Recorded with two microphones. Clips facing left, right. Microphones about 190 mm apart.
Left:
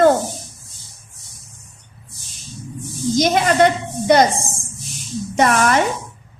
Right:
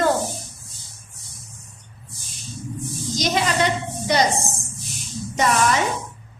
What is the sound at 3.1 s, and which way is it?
Speech, 55° left (ahead or behind).